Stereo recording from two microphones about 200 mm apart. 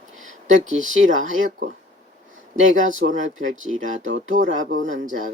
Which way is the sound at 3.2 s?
75° right (ahead or behind).